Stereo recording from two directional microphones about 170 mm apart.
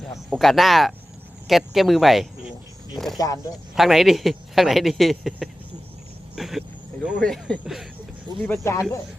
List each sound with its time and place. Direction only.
0.3 s speech: centre (ahead or behind)
3.2 s speech: 20° left (ahead or behind)
3.8 s speech: centre (ahead or behind)
8.4 s speech: 15° left (ahead or behind)